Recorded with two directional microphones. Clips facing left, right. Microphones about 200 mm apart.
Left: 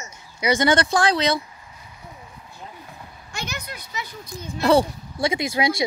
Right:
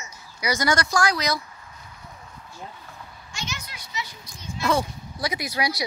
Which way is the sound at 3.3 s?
60° left (ahead or behind).